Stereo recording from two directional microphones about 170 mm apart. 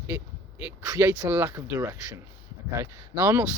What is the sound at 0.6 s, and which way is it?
Speech, 15° right (ahead or behind).